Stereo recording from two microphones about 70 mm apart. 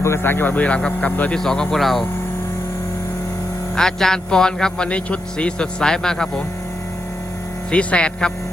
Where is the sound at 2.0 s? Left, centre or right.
Left.